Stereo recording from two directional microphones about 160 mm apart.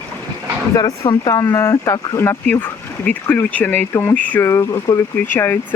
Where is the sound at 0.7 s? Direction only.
25° left (ahead or behind).